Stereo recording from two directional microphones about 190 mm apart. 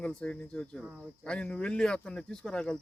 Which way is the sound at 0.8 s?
5° right (ahead or behind).